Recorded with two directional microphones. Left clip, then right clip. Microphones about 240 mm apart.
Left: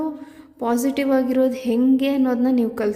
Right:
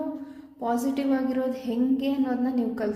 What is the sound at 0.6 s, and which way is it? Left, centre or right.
A woman's voice, left.